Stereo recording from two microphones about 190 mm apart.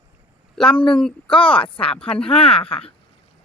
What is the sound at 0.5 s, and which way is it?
Speech, centre (ahead or behind).